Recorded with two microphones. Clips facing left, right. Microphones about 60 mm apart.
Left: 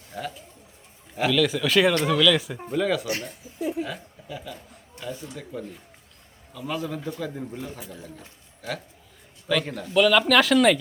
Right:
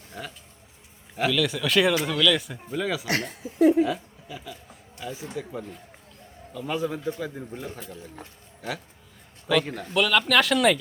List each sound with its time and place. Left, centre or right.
0.1 s speech: centre
3.1 s speech: right
3.8 s a woman's voice: centre
9.5 s speech: centre